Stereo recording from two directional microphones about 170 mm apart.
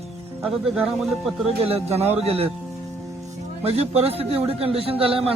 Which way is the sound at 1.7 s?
40° right (ahead or behind).